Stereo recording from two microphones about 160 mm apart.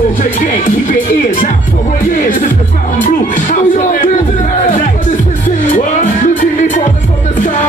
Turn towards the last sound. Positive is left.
turn(degrees=55)  # may be behind; listen again after turning